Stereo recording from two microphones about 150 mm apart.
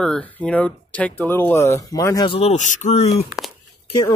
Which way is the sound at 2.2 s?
35° left (ahead or behind).